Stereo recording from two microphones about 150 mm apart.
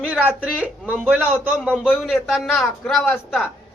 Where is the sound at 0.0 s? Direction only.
10° right (ahead or behind).